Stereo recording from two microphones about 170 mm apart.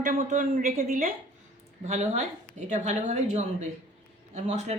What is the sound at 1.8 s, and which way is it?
A woman's voice, 40° right (ahead or behind).